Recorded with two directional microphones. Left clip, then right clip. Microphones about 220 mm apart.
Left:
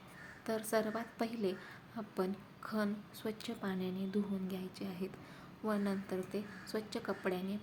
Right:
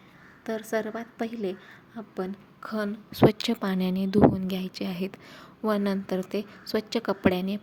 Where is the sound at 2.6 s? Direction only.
30° right (ahead or behind).